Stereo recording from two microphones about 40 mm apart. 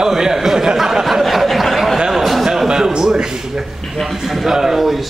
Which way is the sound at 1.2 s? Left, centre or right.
Centre.